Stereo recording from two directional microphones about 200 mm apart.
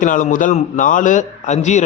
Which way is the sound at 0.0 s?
40° left (ahead or behind).